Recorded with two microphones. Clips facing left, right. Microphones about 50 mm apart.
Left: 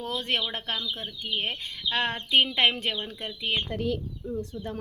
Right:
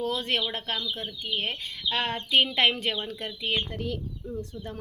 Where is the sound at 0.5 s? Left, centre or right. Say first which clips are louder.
Even; left.